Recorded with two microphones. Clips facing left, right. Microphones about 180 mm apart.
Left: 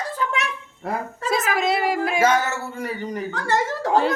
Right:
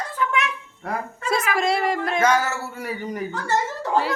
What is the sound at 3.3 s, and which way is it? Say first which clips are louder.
Chuckle: left 3 dB; 90° left.